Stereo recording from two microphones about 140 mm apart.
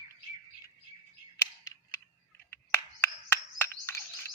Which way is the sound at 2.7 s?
15° left (ahead or behind).